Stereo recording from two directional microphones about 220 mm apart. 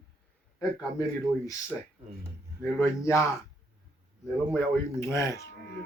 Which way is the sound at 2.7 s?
15° left (ahead or behind).